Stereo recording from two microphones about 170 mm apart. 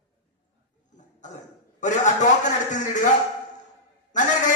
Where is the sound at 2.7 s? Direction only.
45° left (ahead or behind).